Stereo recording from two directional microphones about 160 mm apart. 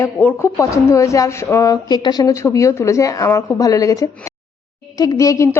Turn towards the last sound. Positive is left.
turn(degrees=20)  # may be behind; listen again after turning